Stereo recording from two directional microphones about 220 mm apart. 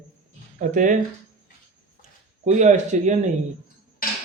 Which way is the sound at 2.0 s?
30° right (ahead or behind).